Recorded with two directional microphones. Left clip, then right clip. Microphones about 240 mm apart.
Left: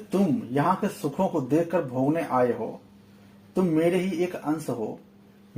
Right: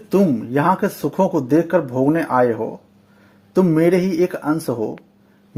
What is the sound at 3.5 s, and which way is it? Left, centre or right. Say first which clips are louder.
Speech: right 8 dB; right.